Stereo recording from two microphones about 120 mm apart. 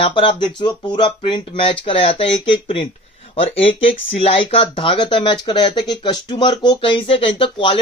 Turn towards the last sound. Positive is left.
turn(degrees=50)  # may be behind; listen again after turning